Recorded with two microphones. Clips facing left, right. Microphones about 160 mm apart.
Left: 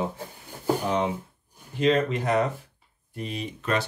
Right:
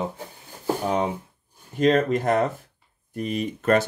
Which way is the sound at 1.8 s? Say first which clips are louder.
Right 3 dB; 45° right (ahead or behind).